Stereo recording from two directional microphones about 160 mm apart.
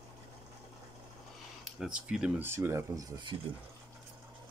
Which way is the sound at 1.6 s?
5° right (ahead or behind).